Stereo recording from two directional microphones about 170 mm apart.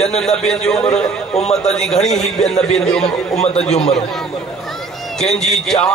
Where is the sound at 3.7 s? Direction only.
40° left (ahead or behind).